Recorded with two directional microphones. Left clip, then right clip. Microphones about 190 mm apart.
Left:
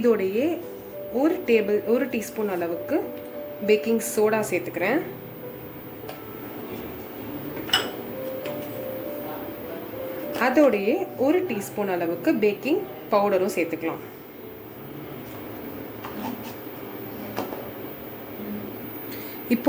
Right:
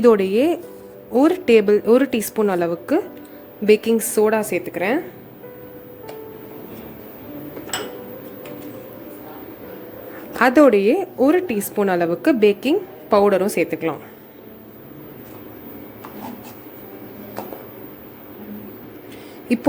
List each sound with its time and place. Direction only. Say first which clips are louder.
0.0 s a woman's voice: right 7 dB; 45° right (ahead or behind)
10.4 s a woman's voice: right 7 dB; 45° right (ahead or behind)
19.5 s speech: right 3 dB; 25° right (ahead or behind)